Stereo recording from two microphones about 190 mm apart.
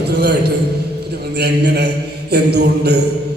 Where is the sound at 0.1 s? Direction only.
60° right (ahead or behind).